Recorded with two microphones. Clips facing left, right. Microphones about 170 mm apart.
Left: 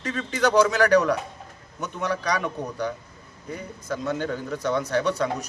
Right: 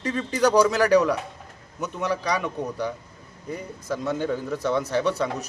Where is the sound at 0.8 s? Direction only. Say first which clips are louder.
Even; 5° right (ahead or behind).